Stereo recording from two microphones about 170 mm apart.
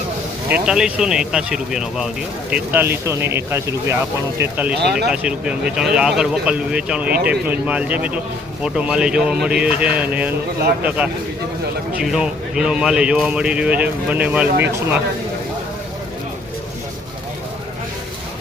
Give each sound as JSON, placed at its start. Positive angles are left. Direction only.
{"t": 0.5, "sound": "a man's voice", "side_deg": -5}
{"t": 4.8, "sound": "speech", "side_deg": -70}
{"t": 5.1, "sound": "a man's voice", "side_deg": -5}